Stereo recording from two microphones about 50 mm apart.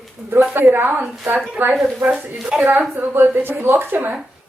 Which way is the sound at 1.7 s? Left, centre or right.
Centre.